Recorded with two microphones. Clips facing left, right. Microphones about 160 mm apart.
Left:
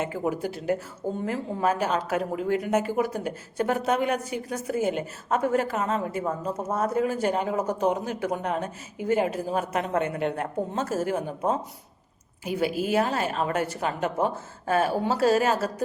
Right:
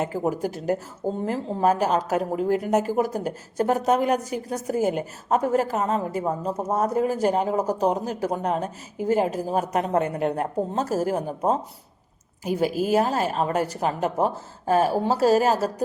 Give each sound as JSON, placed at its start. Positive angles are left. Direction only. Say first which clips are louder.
{"t": 0.0, "sound": "a woman's voice", "louder": "right 3 dB", "side_deg": -40}